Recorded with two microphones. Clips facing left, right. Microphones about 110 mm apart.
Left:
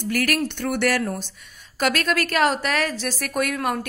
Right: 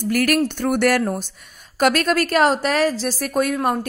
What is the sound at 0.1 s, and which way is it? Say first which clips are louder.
A woman's voice: right 5 dB; 45° right (ahead or behind).